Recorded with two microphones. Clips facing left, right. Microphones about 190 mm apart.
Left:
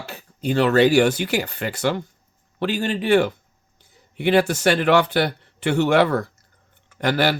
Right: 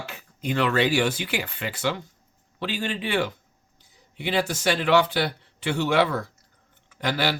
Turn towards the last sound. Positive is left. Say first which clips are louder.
# left 5 dB
turn(degrees=50)  # may be behind; listen again after turning